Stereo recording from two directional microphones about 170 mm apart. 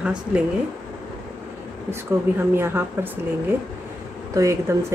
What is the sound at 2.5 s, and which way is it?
Speech, 15° right (ahead or behind).